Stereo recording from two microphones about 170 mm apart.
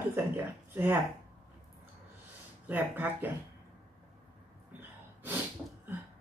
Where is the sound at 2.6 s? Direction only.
10° right (ahead or behind).